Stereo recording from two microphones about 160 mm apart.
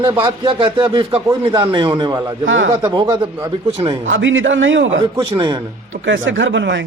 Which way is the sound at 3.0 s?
20° right (ahead or behind).